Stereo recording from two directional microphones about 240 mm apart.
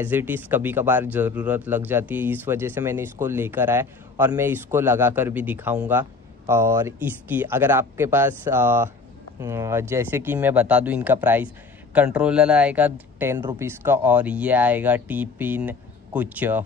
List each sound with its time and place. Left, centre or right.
0.0 s speech: centre